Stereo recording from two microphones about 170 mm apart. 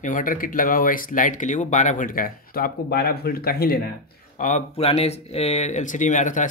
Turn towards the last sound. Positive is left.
turn(degrees=50)  # may be behind; listen again after turning